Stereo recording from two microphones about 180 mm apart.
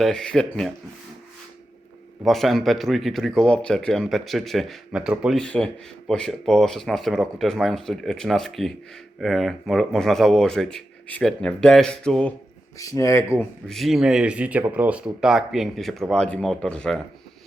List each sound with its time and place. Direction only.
0.0 s speech: 5° left (ahead or behind)
2.2 s speech: centre (ahead or behind)
12.8 s speech: 15° left (ahead or behind)
13.7 s speech: centre (ahead or behind)